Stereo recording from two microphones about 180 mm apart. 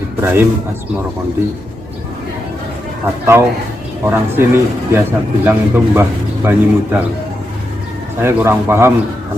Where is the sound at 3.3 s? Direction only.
10° right (ahead or behind).